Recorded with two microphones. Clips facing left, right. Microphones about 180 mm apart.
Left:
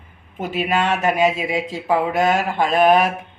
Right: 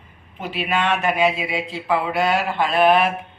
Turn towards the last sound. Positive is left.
turn(degrees=40)  # may be behind; listen again after turning